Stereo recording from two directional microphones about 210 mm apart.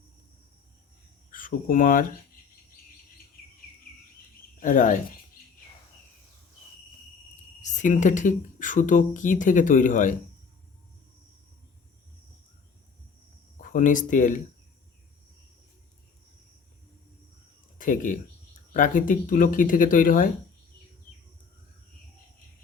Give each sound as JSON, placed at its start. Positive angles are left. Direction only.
{"t": 1.3, "sound": "speech", "side_deg": 40}
{"t": 4.6, "sound": "speech", "side_deg": 40}
{"t": 7.6, "sound": "speech", "side_deg": 35}
{"t": 13.6, "sound": "speech", "side_deg": 40}
{"t": 17.7, "sound": "speech", "side_deg": 40}